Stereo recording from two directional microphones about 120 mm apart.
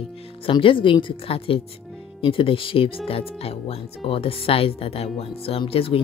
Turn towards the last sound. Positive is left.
turn(degrees=50)  # may be behind; listen again after turning